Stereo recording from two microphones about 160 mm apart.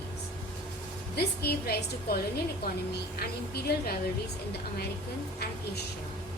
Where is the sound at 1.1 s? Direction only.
80° left.